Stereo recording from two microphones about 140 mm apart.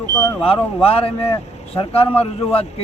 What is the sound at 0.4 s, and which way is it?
A man's voice, 40° left (ahead or behind).